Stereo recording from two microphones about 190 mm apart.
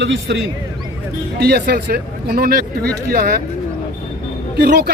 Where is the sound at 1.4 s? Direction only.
55° right (ahead or behind).